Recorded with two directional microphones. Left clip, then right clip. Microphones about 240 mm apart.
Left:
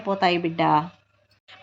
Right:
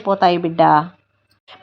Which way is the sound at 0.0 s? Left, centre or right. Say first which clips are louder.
Right 7 dB; right.